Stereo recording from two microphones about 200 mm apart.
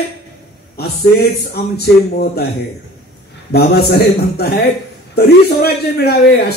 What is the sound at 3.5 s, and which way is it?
A man's voice, 50° left (ahead or behind).